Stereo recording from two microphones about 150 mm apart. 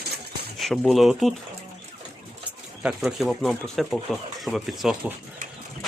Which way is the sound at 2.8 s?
Centre (ahead or behind).